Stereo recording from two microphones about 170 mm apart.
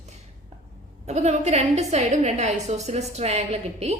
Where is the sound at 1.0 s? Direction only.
40° right (ahead or behind).